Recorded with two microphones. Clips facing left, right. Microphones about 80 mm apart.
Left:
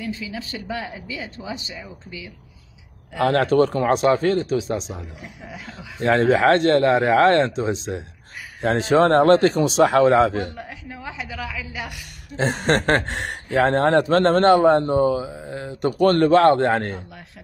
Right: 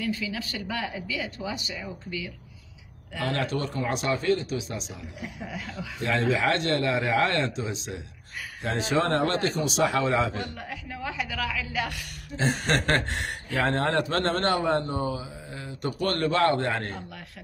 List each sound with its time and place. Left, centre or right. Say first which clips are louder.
0.0 s speech: even; left
1.8 s speech: right 2 dB; centre
3.2 s speech: left 11 dB; left
4.6 s a man's voice: left 9 dB; left
5.2 s speech: right 1 dB; left
6.1 s speech: left 8 dB; left
7.5 s a man's voice: left 9 dB; left
9.0 s speech: left 11 dB; left
9.8 s speech: left 9 dB; left
10.3 s speech: left 6 dB; left
12.6 s a man's voice: left 8 dB; left
13.7 s a man's voice: left 8 dB; left